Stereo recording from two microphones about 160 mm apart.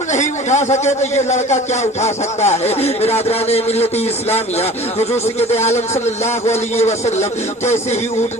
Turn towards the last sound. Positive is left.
turn(degrees=45)  # may be behind; listen again after turning